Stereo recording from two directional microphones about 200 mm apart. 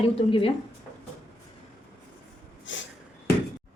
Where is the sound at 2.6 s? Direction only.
65° left (ahead or behind).